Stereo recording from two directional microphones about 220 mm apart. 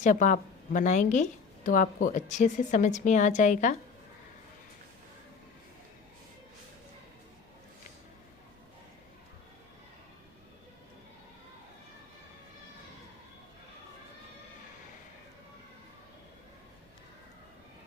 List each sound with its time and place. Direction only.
0.0 s a woman's voice: 35° left (ahead or behind)